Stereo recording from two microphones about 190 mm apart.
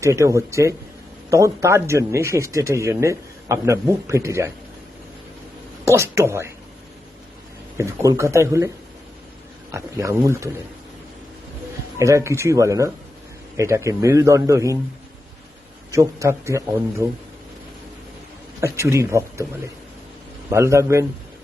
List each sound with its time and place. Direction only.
0.0 s speech: 15° right (ahead or behind)
5.8 s speech: 15° right (ahead or behind)
7.8 s speech: 15° right (ahead or behind)
9.7 s speech: 15° right (ahead or behind)
11.9 s speech: 15° right (ahead or behind)
15.9 s speech: 15° right (ahead or behind)
18.6 s speech: 15° right (ahead or behind)
20.5 s speech: 15° right (ahead or behind)